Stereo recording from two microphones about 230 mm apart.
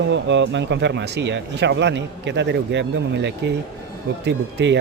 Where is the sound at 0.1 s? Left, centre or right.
Right.